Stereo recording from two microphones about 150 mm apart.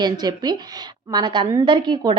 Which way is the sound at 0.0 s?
30° right (ahead or behind).